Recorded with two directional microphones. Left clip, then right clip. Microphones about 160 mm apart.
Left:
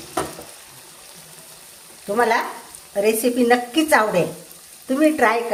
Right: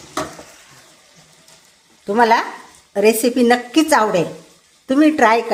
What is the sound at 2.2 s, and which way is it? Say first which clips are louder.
Speech: right 5 dB; 50° right (ahead or behind).